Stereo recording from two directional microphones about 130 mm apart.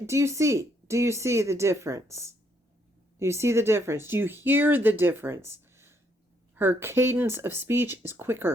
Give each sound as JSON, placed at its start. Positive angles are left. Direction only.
{"t": 0.0, "sound": "speech", "side_deg": -20}